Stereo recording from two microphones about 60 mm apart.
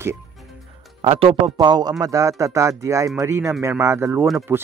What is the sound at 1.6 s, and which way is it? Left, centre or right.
Speech, right.